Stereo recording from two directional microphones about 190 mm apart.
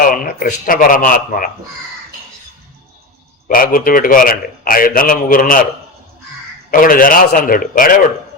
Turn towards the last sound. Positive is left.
turn(degrees=45)  # may be behind; listen again after turning